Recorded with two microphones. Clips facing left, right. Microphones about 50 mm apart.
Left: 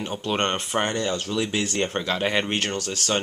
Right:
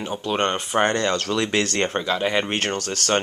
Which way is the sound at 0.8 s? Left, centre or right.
Right.